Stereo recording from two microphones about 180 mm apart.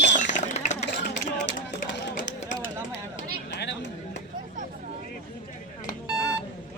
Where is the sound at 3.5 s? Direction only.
75° left (ahead or behind).